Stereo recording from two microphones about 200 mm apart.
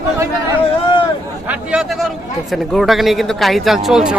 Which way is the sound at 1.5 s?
5° right (ahead or behind).